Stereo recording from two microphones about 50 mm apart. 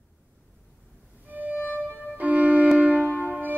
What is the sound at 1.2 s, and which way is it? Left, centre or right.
Music, right.